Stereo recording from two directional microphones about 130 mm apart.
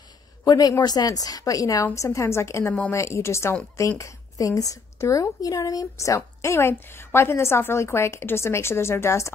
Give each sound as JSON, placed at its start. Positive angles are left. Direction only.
{"t": 0.5, "sound": "a woman's voice", "side_deg": 30}